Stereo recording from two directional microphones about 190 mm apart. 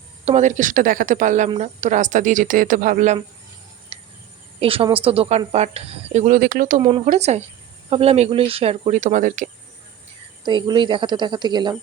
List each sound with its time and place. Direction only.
0.3 s a woman's voice: 40° right (ahead or behind)
3.9 s a sound: 30° right (ahead or behind)
4.6 s a woman's voice: 30° right (ahead or behind)
10.4 s speech: 20° right (ahead or behind)